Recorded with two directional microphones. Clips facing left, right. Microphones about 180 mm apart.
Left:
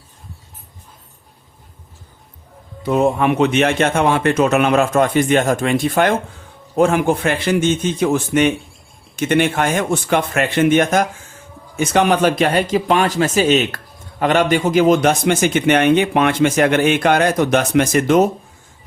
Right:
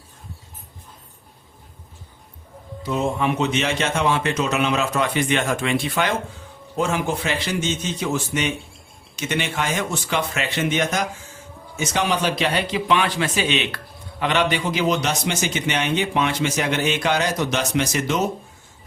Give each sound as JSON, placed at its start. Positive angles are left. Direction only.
{"t": 2.8, "sound": "a man's voice", "side_deg": 55}